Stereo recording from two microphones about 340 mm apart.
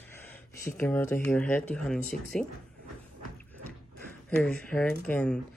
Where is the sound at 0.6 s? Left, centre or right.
Centre.